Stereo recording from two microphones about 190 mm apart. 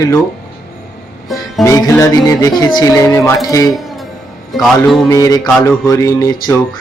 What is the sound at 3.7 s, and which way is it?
Music, centre (ahead or behind).